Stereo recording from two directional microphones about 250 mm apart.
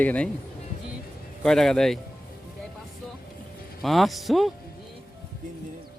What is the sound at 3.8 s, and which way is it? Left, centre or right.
Speech, centre.